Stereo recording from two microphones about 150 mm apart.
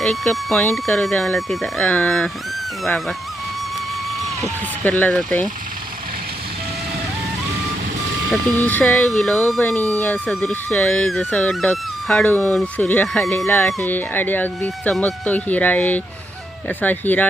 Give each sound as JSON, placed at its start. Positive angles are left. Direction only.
{"t": 0.0, "sound": "speech", "side_deg": 0}
{"t": 4.8, "sound": "speech", "side_deg": 10}
{"t": 8.6, "sound": "speech", "side_deg": 10}